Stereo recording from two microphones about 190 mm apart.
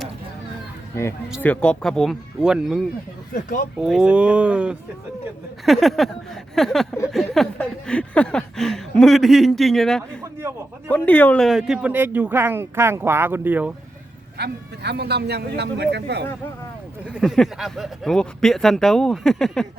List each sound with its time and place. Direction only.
1.4 s speech: 5° left (ahead or behind)
3.3 s speech: 45° left (ahead or behind)
3.8 s speech: 5° right (ahead or behind)
7.1 s a sound: centre (ahead or behind)
10.8 s speech: 10° left (ahead or behind); by 13.7 s 10° right (ahead or behind)
14.3 s speech: 60° right (ahead or behind)
17.2 s speech: centre (ahead or behind)